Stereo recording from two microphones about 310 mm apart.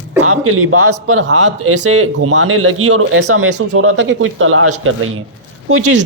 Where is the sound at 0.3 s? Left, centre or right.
Right.